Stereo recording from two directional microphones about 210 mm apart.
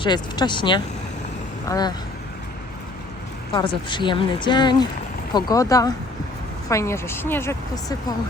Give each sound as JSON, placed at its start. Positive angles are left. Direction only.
{"t": 0.0, "sound": "speech", "side_deg": 20}
{"t": 3.5, "sound": "a woman's voice", "side_deg": 25}